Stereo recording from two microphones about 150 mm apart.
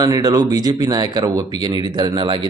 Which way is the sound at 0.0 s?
25° right (ahead or behind).